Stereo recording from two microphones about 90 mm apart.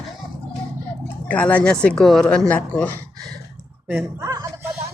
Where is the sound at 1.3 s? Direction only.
15° left (ahead or behind).